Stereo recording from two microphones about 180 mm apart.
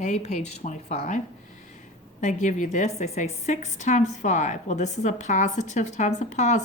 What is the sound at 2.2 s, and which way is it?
A woman's voice, 45° left (ahead or behind).